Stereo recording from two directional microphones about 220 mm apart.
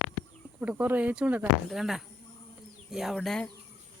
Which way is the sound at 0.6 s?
5° right (ahead or behind).